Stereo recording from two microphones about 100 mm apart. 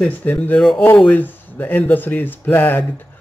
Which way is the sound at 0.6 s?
Centre (ahead or behind).